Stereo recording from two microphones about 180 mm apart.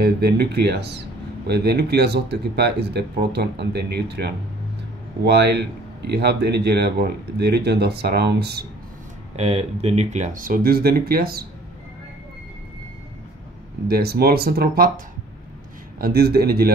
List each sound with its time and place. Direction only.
0.0 s speech: 65° right (ahead or behind)
9.4 s speech: 35° right (ahead or behind); by 11.4 s 55° right (ahead or behind)
13.8 s speech: 60° right (ahead or behind)
16.0 s speech: 60° right (ahead or behind)